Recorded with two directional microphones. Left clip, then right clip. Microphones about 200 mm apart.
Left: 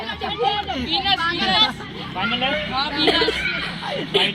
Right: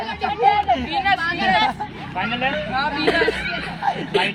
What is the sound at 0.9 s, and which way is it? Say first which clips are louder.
Speech: left 2 dB; 15° right (ahead or behind).